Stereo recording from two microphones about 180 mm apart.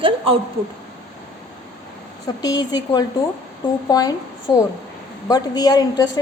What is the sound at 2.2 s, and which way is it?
A woman's voice, 20° left (ahead or behind).